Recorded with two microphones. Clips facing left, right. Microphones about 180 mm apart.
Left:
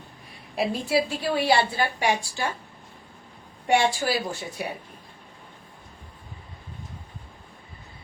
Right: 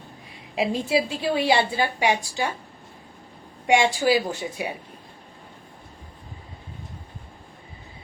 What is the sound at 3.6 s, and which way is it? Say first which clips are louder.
Speech: right 3 dB; 15° right (ahead or behind).